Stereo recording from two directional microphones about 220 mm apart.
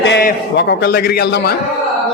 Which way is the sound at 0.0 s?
50° left (ahead or behind).